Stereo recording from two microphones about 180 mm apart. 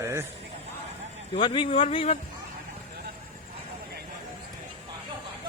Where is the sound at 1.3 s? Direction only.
25° left (ahead or behind).